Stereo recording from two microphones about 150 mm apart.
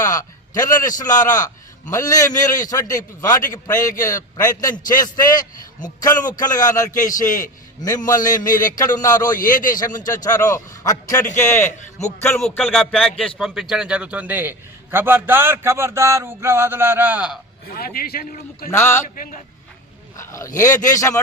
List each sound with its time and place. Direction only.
0.0 s a man's voice: 25° left (ahead or behind)
7.1 s a man's voice: 60° left (ahead or behind)
8.0 s a man's voice: 25° left (ahead or behind)
9.6 s a man's voice: 65° left (ahead or behind)
10.2 s a man's voice: 25° left (ahead or behind)
12.4 s a man's voice: centre (ahead or behind)
17.7 s a man's voice: 90° left
18.7 s a man's voice: 15° left (ahead or behind)
19.0 s a man's voice: 65° left (ahead or behind)
20.1 s a man's voice: 20° left (ahead or behind)